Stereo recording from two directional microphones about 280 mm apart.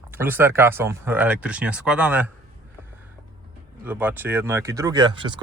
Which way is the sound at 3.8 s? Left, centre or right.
Centre.